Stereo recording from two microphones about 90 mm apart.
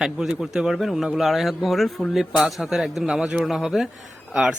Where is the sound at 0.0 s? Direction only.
10° right (ahead or behind).